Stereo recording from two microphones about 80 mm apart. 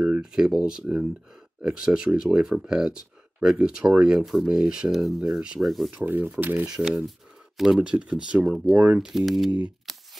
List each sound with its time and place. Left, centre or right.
0.0 s speech: centre
6.0 s speech: right
6.6 s speech: centre
7.8 s speech: centre
9.9 s shuffling cards: centre